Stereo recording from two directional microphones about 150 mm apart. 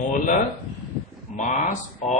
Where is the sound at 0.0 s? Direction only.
60° left (ahead or behind).